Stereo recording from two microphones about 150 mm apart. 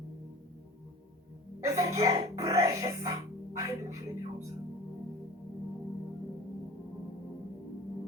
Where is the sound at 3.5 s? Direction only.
20° right (ahead or behind).